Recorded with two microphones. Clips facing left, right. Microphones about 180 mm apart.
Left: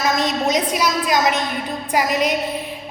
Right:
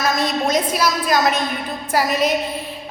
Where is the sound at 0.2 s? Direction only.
15° left (ahead or behind).